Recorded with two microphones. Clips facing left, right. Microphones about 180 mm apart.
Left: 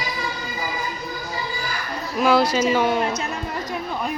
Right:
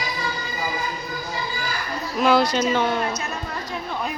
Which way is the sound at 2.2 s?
5° left (ahead or behind).